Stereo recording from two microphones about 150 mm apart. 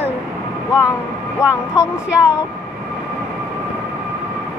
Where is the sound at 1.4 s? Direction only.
20° left (ahead or behind).